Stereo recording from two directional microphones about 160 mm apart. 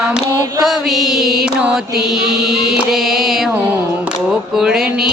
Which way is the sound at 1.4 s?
5° right (ahead or behind).